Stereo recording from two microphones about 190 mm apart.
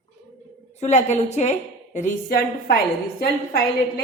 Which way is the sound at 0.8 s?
35° left (ahead or behind).